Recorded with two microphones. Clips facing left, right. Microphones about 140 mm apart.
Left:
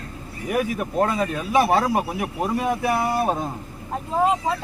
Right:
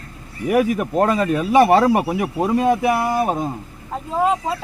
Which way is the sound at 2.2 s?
25° right (ahead or behind).